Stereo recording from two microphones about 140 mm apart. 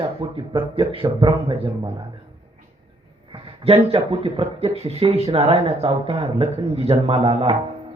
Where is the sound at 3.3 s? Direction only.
45° right (ahead or behind).